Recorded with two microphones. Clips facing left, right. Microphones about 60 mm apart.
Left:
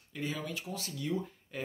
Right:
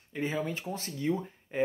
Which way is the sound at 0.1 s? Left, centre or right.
Right.